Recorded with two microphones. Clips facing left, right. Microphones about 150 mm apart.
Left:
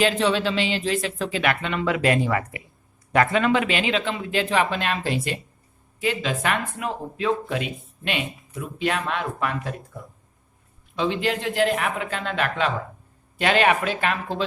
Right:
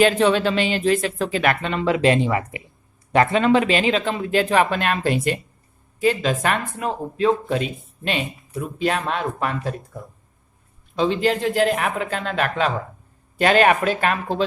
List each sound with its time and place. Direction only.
0.0 s speech: 50° right (ahead or behind)
6.0 s speech: 40° right (ahead or behind)
10.9 s speech: 35° right (ahead or behind)